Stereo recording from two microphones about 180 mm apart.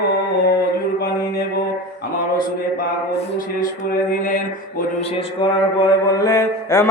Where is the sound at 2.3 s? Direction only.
50° left (ahead or behind).